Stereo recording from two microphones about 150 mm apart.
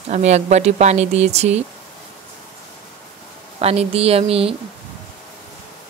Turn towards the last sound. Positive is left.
turn(degrees=-40)  # may be behind; listen again after turning